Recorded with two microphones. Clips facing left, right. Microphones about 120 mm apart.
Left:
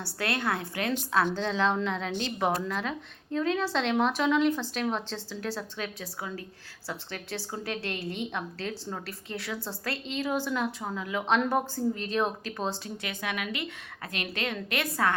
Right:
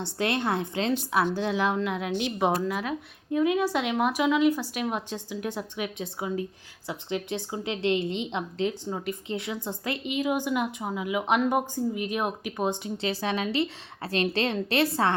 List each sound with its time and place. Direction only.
0.0 s a woman's voice: 20° right (ahead or behind)
1.2 s a woman's voice: 10° right (ahead or behind)
13.1 s a woman's voice: 30° right (ahead or behind)